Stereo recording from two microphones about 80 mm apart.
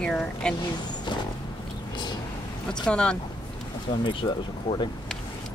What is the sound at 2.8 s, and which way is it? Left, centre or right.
Speech, centre.